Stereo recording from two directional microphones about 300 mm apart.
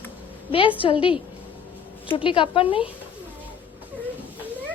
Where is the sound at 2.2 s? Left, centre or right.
Centre.